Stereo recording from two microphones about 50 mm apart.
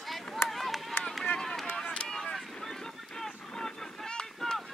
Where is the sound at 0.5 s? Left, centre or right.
Centre.